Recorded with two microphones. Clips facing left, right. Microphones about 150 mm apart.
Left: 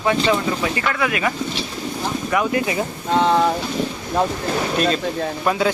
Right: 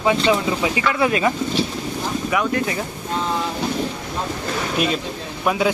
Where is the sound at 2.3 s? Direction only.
5° left (ahead or behind).